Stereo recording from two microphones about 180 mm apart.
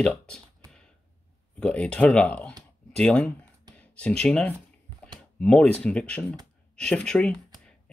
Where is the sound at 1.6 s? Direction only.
5° left (ahead or behind).